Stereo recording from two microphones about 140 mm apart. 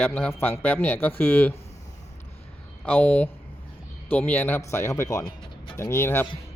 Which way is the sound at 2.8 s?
10° left (ahead or behind).